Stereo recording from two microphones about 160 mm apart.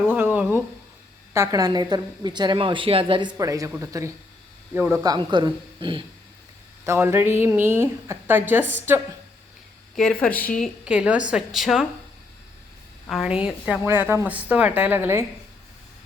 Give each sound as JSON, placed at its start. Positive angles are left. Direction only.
{"t": 0.1, "sound": "a sound", "side_deg": -10}
{"t": 1.3, "sound": "a woman's voice", "side_deg": -20}
{"t": 6.8, "sound": "a woman's voice", "side_deg": -15}
{"t": 9.9, "sound": "speech", "side_deg": 5}
{"t": 10.8, "sound": "a woman's voice", "side_deg": -5}
{"t": 13.1, "sound": "a woman's voice", "side_deg": -5}